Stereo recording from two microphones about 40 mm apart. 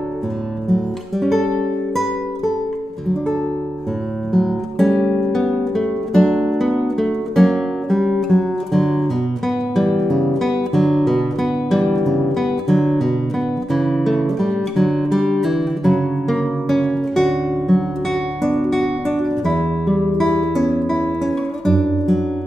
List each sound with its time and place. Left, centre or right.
0.7 s guitar: centre
4.3 s music: centre
7.0 s guitar: centre
11.9 s music: centre
12.4 s guitar: centre
13.7 s music: centre
21.6 s guitar: centre